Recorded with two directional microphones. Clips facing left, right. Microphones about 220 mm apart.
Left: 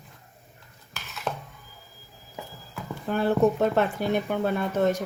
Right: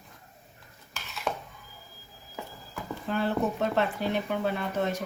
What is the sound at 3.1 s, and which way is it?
Speech, 50° left (ahead or behind).